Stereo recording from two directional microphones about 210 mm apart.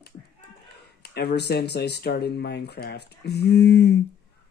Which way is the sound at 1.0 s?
50° left (ahead or behind).